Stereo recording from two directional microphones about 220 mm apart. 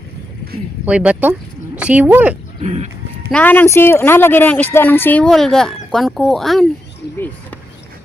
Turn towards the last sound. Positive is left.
turn(degrees=10)  # may be behind; listen again after turning